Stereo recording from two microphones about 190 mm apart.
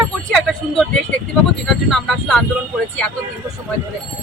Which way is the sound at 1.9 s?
Centre (ahead or behind).